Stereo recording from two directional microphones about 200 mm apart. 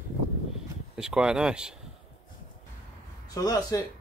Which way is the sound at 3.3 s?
20° left (ahead or behind).